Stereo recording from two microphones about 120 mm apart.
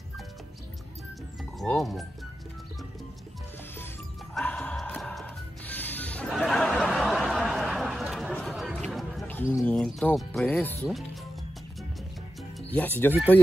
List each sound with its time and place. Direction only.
1.6 s speech: centre (ahead or behind)
4.3 s music: 10° left (ahead or behind)
6.3 s a sound: 5° left (ahead or behind)
7.0 s chatter: centre (ahead or behind)
9.3 s bird: 15° left (ahead or behind)
9.7 s speech: 5° left (ahead or behind)
10.5 s speech: 15° left (ahead or behind)
12.7 s speech: 15° left (ahead or behind)